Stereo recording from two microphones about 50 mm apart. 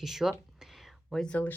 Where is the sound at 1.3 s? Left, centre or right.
Left.